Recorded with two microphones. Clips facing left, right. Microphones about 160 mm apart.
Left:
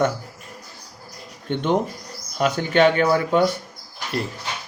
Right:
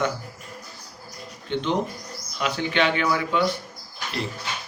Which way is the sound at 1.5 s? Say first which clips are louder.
Left 3 dB; 50° left (ahead or behind).